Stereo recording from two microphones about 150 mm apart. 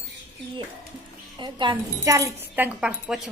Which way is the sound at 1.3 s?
30° right (ahead or behind).